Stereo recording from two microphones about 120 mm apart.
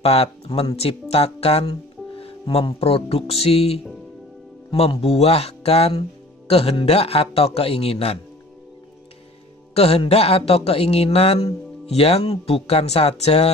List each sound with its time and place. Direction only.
0.0 s speech: 55° left (ahead or behind)
9.8 s speech: 55° left (ahead or behind)